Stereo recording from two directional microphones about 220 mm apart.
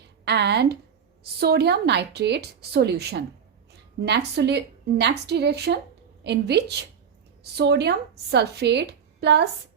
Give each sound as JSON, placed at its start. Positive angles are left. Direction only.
{"t": 0.3, "sound": "a woman's voice", "side_deg": -50}
{"t": 4.4, "sound": "a woman's voice", "side_deg": -50}